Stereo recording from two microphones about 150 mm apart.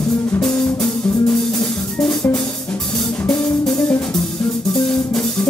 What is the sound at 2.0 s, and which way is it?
Music, 10° left (ahead or behind).